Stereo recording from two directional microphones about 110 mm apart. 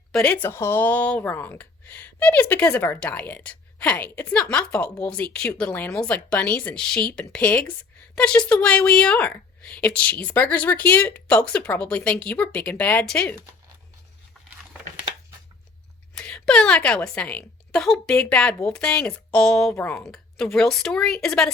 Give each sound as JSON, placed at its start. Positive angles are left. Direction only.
{"t": 0.1, "sound": "speech", "side_deg": 10}
{"t": 16.1, "sound": "speech", "side_deg": 5}
{"t": 19.7, "sound": "speech", "side_deg": 20}
{"t": 20.1, "sound": "a woman's voice", "side_deg": 5}